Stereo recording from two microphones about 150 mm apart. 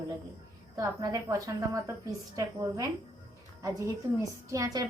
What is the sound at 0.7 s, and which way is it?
A woman's voice, 25° right (ahead or behind).